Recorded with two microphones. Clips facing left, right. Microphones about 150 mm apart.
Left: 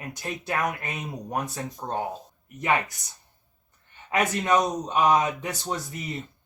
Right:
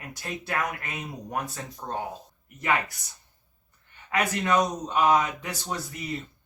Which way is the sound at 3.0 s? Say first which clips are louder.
Left 1 dB; 20° left (ahead or behind).